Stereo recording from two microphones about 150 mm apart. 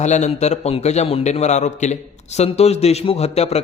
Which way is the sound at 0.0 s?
50° left (ahead or behind).